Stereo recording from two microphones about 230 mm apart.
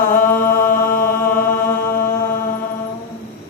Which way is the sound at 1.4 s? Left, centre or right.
Left.